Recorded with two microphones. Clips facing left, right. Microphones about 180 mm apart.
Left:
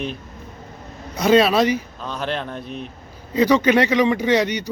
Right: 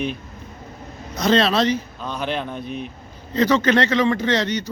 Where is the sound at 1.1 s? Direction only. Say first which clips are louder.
Left 3 dB; 10° left (ahead or behind).